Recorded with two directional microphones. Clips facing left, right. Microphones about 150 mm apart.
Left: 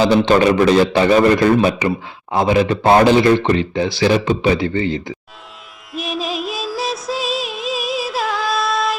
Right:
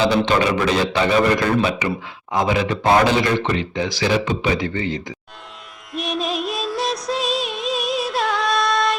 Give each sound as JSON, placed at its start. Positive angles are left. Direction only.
{"t": 0.0, "sound": "speech", "side_deg": 35}
{"t": 5.9, "sound": "music", "side_deg": 0}